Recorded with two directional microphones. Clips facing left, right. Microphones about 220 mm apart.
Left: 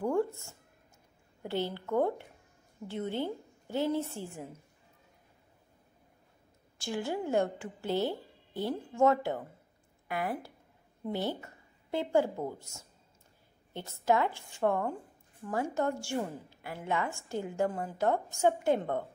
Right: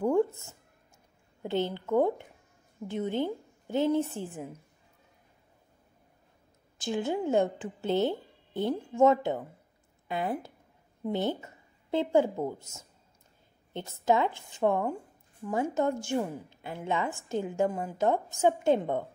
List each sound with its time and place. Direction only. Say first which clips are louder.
0.0 s a sound: right 4 dB; 20° right (ahead or behind)
1.4 s a woman's voice: right 4 dB; 20° right (ahead or behind)
6.8 s a woman's voice: right 4 dB; 20° right (ahead or behind)